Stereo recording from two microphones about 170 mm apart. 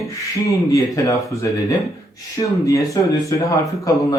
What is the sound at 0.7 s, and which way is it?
Speech, 20° left (ahead or behind).